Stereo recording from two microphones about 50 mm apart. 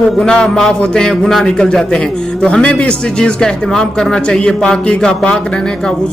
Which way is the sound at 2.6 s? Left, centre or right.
Left.